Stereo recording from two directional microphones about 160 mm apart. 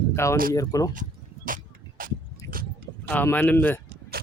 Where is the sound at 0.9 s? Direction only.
55° right (ahead or behind).